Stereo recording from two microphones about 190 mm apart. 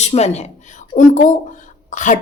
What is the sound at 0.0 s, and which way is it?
A woman's voice, 35° left (ahead or behind).